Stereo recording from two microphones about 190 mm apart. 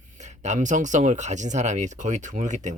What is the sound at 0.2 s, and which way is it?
Speech, 40° right (ahead or behind).